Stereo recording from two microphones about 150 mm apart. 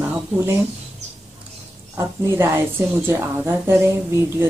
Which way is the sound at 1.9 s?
15° right (ahead or behind).